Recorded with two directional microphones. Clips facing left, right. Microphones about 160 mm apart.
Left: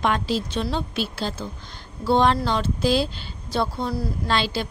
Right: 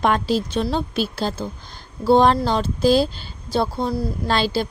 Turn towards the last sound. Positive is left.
turn(degrees=-40)  # may be behind; listen again after turning